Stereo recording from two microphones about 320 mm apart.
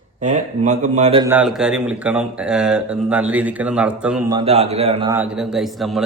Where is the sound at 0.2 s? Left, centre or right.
Right; by 4.4 s centre.